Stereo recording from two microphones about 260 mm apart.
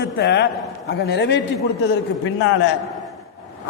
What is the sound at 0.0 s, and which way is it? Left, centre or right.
A man's voice, left.